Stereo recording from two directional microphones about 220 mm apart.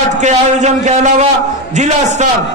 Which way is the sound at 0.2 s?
30° right (ahead or behind).